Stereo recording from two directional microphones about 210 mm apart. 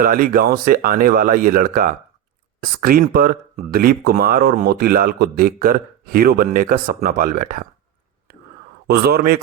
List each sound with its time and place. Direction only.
0.0 s speech: 40° right (ahead or behind)
8.9 s speech: 50° right (ahead or behind)